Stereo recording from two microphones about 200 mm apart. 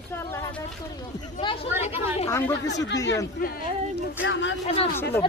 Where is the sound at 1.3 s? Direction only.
25° left (ahead or behind).